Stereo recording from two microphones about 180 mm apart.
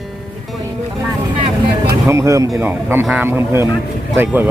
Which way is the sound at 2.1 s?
15° right (ahead or behind).